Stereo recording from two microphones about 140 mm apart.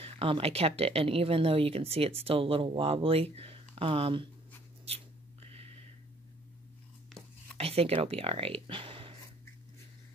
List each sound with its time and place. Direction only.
0.0 s speech: 40° right (ahead or behind)
4.8 s a sound: 45° right (ahead or behind)
7.5 s speech: 45° right (ahead or behind)